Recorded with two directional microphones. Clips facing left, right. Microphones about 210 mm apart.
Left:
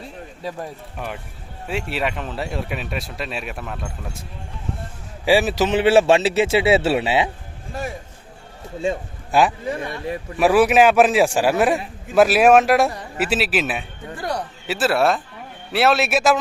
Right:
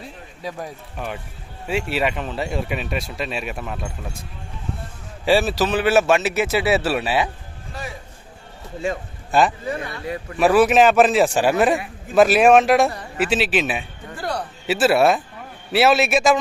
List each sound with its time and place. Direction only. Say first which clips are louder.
0.9 s speech: right 2 dB; centre (ahead or behind)
5.2 s a man's voice: left 1 dB; 15° left (ahead or behind)
7.7 s a sound: left 5 dB; 50° left (ahead or behind)
10.3 s a man's voice: even; 10° left (ahead or behind)
14.2 s a sound: even; 20° left (ahead or behind)
14.7 s speech: right 3 dB; 5° right (ahead or behind)